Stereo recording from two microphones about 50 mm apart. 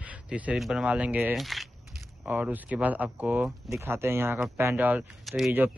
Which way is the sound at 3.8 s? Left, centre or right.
Right.